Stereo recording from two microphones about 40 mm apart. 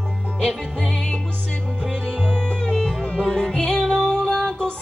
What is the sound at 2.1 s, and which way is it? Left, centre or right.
Music, left.